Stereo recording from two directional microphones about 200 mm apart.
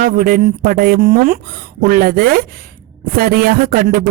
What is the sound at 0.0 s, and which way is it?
A woman's voice, 45° right (ahead or behind).